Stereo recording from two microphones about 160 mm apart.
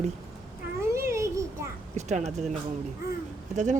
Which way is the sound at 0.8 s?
15° right (ahead or behind).